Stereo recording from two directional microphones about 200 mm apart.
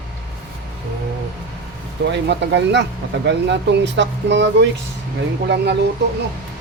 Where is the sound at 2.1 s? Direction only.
60° right (ahead or behind).